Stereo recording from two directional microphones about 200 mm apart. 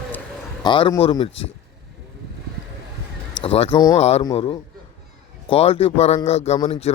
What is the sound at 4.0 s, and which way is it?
A man's voice, 30° left (ahead or behind).